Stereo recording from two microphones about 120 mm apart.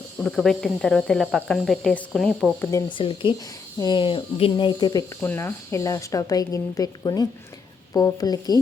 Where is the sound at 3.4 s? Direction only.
30° left (ahead or behind); by 4.5 s 50° left (ahead or behind).